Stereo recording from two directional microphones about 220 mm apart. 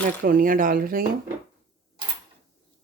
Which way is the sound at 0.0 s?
40° right (ahead or behind).